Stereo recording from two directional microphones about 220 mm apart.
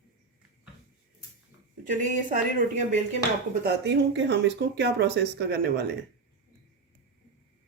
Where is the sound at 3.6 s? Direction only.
50° right (ahead or behind).